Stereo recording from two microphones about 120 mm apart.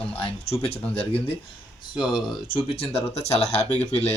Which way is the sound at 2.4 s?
50° left (ahead or behind).